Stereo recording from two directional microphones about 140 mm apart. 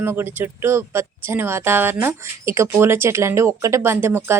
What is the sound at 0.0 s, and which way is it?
Speech, 15° right (ahead or behind).